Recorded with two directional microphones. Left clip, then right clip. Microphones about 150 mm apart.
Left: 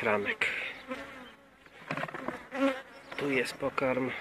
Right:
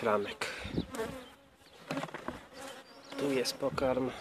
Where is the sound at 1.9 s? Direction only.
25° right (ahead or behind).